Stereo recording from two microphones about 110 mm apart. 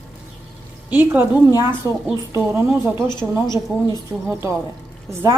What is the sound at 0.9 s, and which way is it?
Speech, 20° right (ahead or behind).